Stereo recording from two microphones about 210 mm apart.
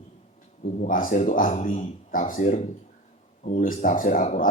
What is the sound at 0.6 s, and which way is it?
Speech, 40° left (ahead or behind).